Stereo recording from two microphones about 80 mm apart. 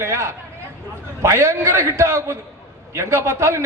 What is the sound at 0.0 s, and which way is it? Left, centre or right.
A man's voice, right.